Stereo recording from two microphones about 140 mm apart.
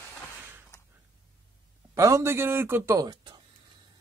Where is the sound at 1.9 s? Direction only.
20° right (ahead or behind).